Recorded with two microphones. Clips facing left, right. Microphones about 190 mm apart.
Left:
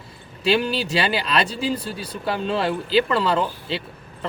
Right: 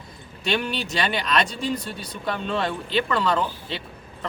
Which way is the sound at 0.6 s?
30° left (ahead or behind).